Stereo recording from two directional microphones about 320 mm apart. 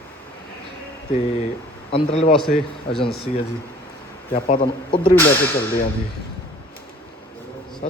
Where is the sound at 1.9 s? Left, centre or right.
Centre.